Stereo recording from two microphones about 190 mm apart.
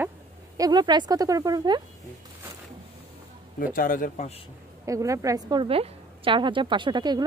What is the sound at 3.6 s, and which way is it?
Speech, 45° left (ahead or behind).